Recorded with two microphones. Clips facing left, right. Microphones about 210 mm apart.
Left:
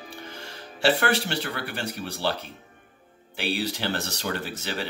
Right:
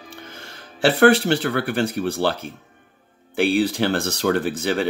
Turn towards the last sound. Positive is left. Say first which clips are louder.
# right 10 dB
turn(degrees=-50)  # may be behind; listen again after turning